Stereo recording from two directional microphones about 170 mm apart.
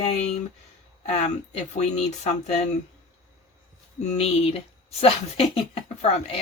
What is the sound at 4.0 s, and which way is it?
Speech, 40° left (ahead or behind).